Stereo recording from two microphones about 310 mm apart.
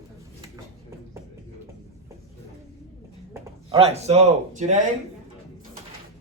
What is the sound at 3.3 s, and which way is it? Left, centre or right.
Speech, centre.